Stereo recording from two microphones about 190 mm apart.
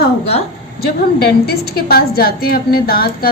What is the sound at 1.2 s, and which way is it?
A woman's voice, 55° left (ahead or behind).